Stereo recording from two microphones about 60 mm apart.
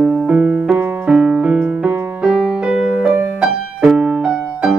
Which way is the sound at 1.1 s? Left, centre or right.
Centre.